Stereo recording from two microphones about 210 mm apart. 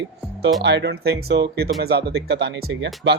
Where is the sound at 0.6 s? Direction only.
55° right (ahead or behind).